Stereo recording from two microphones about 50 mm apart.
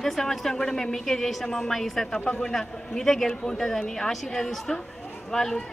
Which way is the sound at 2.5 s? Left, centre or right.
Centre.